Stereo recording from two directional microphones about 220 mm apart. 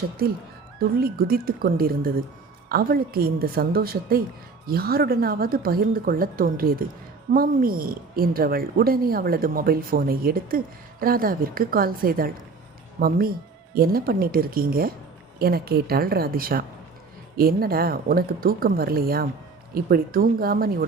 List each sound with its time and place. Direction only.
0.8 s a woman's voice: 45° right (ahead or behind)